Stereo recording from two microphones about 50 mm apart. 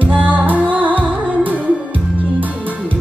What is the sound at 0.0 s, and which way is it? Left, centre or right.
Music, right.